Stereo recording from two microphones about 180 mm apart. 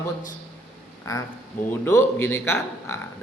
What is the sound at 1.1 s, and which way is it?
A man's voice, 15° left (ahead or behind).